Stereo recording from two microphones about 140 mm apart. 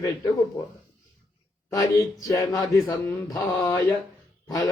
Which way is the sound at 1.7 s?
25° left (ahead or behind).